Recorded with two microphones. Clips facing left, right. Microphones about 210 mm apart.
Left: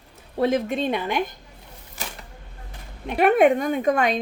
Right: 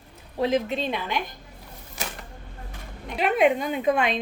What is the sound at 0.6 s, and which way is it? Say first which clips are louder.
Speech: left 4 dB; 50° left (ahead or behind).